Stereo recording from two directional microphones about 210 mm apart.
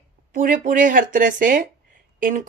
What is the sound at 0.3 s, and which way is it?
A woman's voice, 40° right (ahead or behind).